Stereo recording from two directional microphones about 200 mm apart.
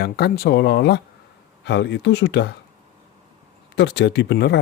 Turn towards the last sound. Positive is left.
turn(degrees=55)  # may be behind; listen again after turning